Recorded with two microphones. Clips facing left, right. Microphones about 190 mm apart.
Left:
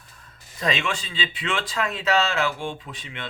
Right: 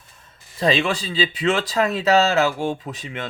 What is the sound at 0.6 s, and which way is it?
Speech, 35° right (ahead or behind).